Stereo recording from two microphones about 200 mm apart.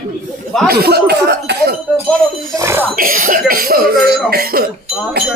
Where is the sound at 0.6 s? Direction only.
50° right (ahead or behind).